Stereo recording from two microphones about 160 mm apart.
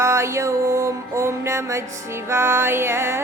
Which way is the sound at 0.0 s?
15° right (ahead or behind).